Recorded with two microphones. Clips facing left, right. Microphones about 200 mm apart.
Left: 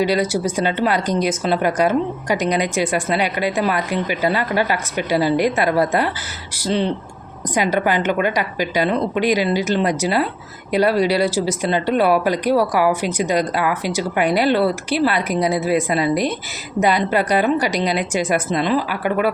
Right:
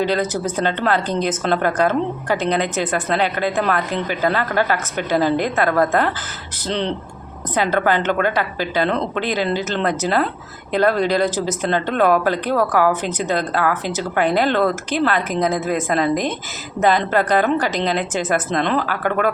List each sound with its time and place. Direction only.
0.0 s speech: 10° left (ahead or behind)